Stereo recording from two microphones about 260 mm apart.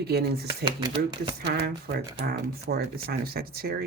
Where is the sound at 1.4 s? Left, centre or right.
Right.